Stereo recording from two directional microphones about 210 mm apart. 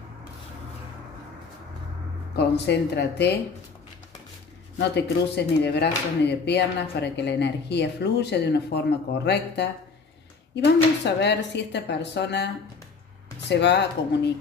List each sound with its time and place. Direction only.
2.3 s speech: 50° left (ahead or behind)
4.7 s speech: 55° left (ahead or behind)
13.5 s speech: 55° left (ahead or behind)